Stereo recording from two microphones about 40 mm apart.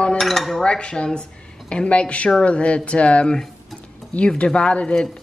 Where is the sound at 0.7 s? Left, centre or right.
Left.